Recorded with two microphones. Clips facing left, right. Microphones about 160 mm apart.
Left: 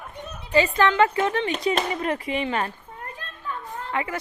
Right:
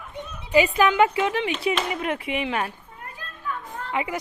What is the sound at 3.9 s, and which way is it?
Speech, 15° right (ahead or behind).